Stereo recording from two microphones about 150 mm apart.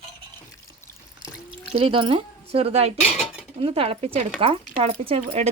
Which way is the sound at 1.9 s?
35° right (ahead or behind).